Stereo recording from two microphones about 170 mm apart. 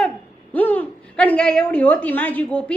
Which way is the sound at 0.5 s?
10° left (ahead or behind).